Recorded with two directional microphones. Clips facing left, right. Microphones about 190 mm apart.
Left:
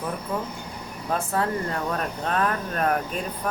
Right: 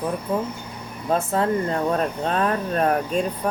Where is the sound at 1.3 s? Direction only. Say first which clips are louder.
Right 4 dB; 25° right (ahead or behind).